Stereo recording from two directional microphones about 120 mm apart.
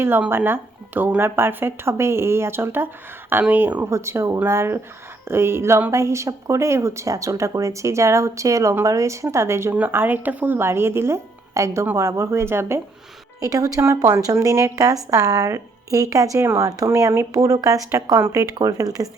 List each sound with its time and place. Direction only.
0.0 s speech: 20° right (ahead or behind)